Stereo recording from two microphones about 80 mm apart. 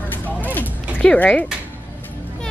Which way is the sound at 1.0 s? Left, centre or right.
Centre.